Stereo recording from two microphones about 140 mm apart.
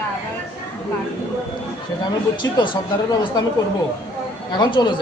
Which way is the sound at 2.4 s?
20° left (ahead or behind).